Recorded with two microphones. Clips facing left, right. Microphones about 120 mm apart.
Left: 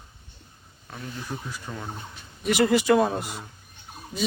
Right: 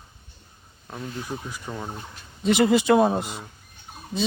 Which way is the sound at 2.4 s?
20° right (ahead or behind).